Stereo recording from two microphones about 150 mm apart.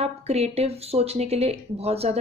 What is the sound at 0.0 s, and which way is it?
A woman's voice, 45° right (ahead or behind).